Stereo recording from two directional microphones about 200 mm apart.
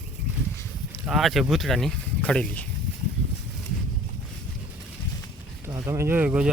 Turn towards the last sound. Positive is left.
turn(degrees=-10)  # may be behind; listen again after turning